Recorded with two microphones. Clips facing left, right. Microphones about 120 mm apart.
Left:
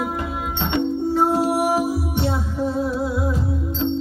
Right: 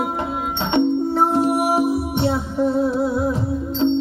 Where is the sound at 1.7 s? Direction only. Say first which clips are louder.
Right 2 dB; 25° right (ahead or behind).